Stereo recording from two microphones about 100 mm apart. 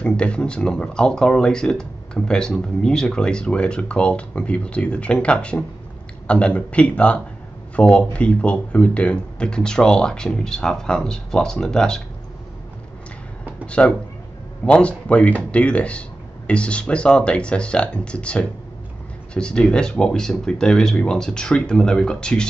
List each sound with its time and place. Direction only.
0.0 s speech: 10° left (ahead or behind)
13.7 s speech: 10° left (ahead or behind)